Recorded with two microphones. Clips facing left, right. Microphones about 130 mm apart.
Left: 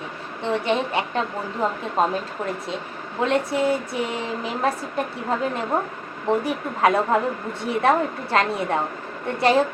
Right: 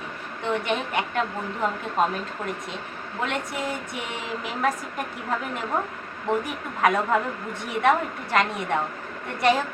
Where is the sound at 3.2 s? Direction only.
30° left (ahead or behind).